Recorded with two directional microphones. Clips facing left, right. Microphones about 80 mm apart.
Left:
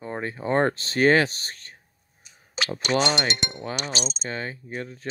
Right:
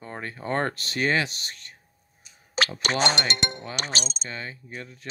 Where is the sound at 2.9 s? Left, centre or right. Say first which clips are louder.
Left 3 dB; right.